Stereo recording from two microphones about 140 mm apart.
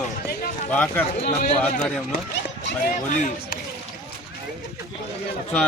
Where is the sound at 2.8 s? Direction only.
90° left.